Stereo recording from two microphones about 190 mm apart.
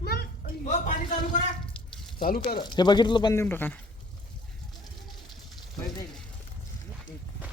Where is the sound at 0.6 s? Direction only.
40° left (ahead or behind).